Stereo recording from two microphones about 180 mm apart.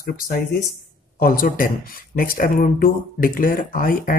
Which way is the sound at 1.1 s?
55° left (ahead or behind).